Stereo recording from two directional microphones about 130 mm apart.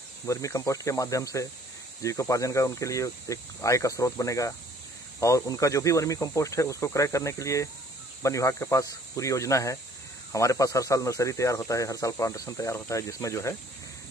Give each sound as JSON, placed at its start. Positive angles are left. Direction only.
{"t": 0.3, "sound": "speech", "side_deg": 25}